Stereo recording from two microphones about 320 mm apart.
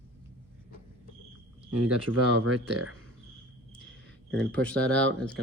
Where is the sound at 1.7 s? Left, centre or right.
Right.